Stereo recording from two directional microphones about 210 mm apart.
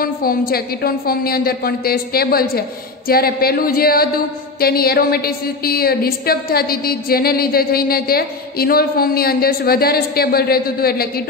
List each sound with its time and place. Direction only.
0.0 s a woman's voice: 45° left (ahead or behind)